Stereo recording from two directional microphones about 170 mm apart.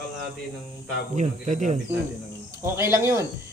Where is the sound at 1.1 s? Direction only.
45° right (ahead or behind).